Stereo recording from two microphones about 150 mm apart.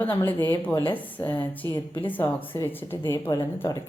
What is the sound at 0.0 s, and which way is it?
Speech, 15° left (ahead or behind).